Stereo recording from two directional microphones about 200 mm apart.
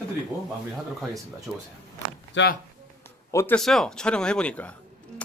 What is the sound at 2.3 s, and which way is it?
Speech, 60° left (ahead or behind).